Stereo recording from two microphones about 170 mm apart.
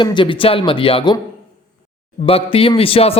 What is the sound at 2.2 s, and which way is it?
Speech, 35° left (ahead or behind).